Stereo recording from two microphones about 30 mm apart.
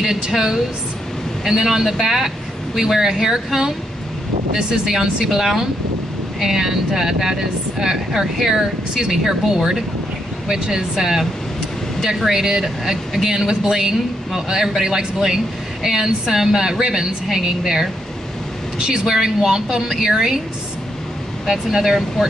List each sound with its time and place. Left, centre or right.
0.1 s speech: centre
4.6 s speech: right
12.3 s speech: centre
19.0 s speech: centre
21.5 s speech: centre